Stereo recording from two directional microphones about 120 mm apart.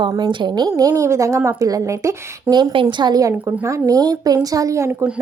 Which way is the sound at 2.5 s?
35° right (ahead or behind).